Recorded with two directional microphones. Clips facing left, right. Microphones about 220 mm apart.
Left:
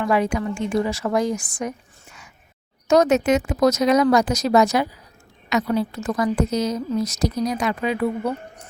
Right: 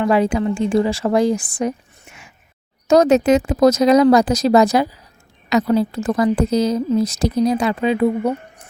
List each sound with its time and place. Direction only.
0.0 s a woman's voice: 30° right (ahead or behind)